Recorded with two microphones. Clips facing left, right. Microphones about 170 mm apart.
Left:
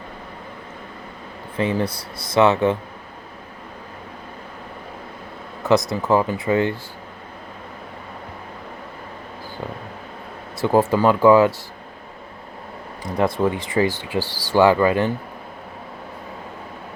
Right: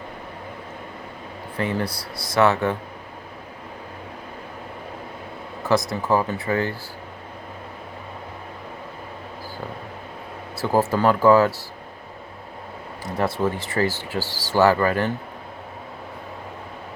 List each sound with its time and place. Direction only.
1.5 s speech: 20° left (ahead or behind)
5.9 s speech: 15° left (ahead or behind)
10.6 s speech: 20° left (ahead or behind)
13.4 s speech: 15° left (ahead or behind)